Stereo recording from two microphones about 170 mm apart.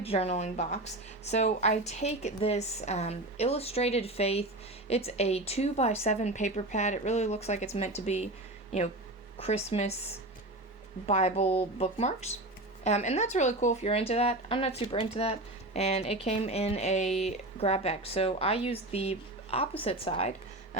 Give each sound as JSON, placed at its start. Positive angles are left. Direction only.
{"t": 0.0, "sound": "speech", "side_deg": 35}
{"t": 9.4, "sound": "speech", "side_deg": 40}